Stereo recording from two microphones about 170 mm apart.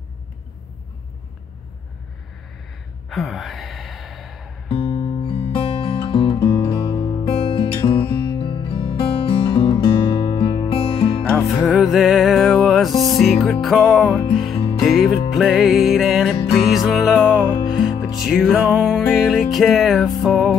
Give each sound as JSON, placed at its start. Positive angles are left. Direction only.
{"t": 3.1, "sound": "sigh", "side_deg": 0}
{"t": 4.6, "sound": "music", "side_deg": 30}
{"t": 11.2, "sound": "music", "side_deg": 0}
{"t": 17.6, "sound": "music", "side_deg": 30}
{"t": 18.2, "sound": "music", "side_deg": 0}